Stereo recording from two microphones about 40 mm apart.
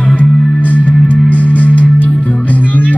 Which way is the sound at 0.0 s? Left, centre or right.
Left.